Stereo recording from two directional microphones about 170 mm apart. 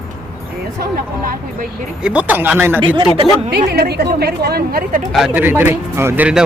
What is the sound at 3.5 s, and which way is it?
A woman's voice, 65° right (ahead or behind).